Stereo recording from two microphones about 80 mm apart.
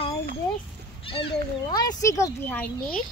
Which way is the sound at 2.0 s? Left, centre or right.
Left.